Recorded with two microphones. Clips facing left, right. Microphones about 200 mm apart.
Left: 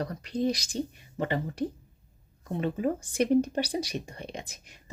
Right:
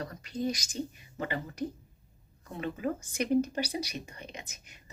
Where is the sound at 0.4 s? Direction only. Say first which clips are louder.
Left 4 dB; 35° left (ahead or behind).